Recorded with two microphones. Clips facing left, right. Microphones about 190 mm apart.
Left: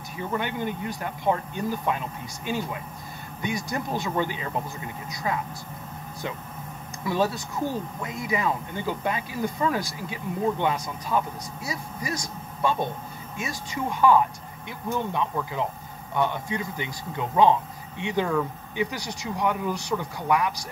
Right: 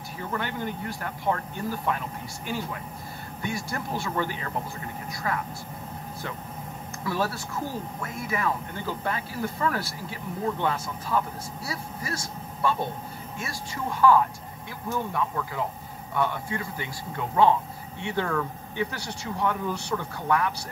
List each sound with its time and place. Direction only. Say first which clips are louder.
0.2 s speech: left 3 dB; 15° left (ahead or behind)
7.1 s speech: left 3 dB; 20° left (ahead or behind)